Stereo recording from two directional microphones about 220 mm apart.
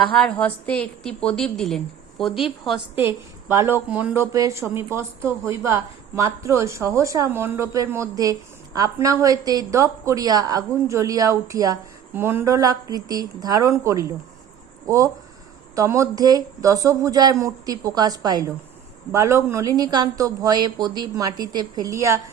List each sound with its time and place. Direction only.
0.0 s a woman's voice: 5° left (ahead or behind)
3.0 s a woman's voice: 10° right (ahead or behind)